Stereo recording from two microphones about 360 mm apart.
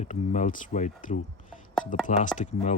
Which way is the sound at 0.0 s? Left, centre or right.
Centre.